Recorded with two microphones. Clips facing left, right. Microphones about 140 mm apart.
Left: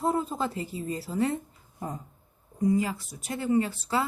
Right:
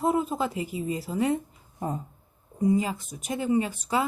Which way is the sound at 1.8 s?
25° right (ahead or behind).